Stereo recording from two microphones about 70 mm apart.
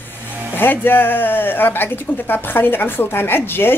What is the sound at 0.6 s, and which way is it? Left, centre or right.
Speech, left.